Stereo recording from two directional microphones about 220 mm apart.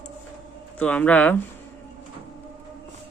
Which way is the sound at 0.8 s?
5° left (ahead or behind).